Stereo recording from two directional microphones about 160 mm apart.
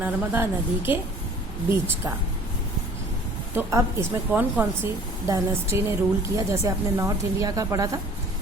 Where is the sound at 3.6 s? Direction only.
20° right (ahead or behind).